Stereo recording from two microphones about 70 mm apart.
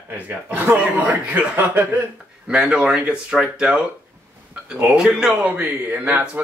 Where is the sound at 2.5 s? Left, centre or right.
Centre.